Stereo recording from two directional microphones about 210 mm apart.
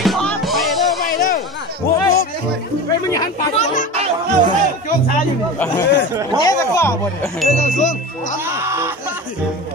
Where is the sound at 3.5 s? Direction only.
35° left (ahead or behind).